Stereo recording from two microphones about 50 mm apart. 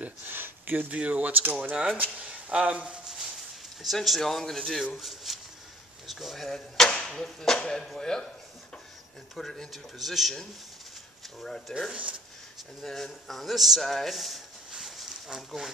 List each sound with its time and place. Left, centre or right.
0.3 s a sound: right
0.9 s speech: right
3.8 s a man's voice: centre
7.8 s a man's voice: centre
9.3 s a man's voice: centre
11.9 s speech: right
12.8 s a man's voice: centre
14.7 s a sound: centre
15.2 s speech: centre